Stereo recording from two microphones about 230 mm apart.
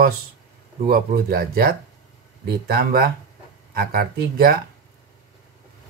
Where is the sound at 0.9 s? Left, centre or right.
Right.